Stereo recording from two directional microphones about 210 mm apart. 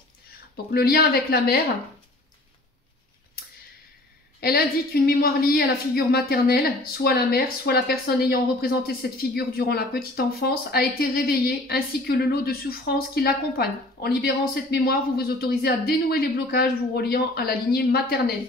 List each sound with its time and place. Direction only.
0.7 s a woman's voice: 45° left (ahead or behind)
4.4 s a woman's voice: 45° left (ahead or behind)